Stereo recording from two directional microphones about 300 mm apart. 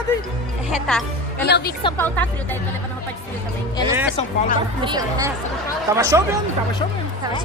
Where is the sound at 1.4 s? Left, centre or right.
Left.